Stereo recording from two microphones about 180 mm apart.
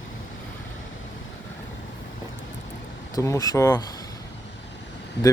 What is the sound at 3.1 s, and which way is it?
Speech, 20° left (ahead or behind).